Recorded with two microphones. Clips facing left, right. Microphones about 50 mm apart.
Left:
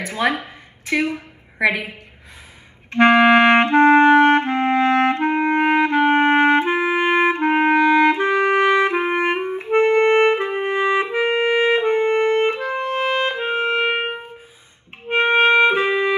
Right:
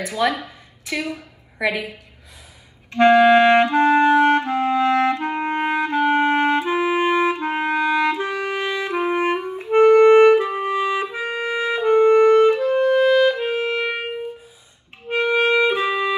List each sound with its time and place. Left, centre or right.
0.0 s a woman's voice: left
2.9 s clarinet: left